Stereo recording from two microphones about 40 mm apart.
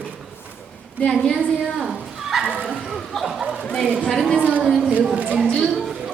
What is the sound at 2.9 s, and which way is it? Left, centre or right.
Speech, centre.